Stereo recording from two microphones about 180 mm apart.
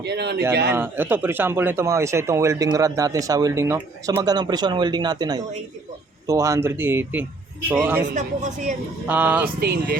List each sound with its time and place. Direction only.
0.0 s a man's voice: 70° right (ahead or behind)
0.7 s speech: 10° right (ahead or behind)
8.1 s speech: 45° right (ahead or behind)
9.0 s speech: 10° right (ahead or behind)
9.6 s speech: 60° right (ahead or behind)